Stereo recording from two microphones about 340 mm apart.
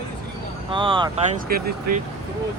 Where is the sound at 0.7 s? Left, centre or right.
Centre.